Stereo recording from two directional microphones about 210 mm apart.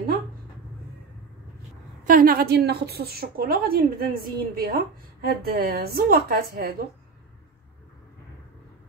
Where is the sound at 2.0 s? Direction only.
40° right (ahead or behind).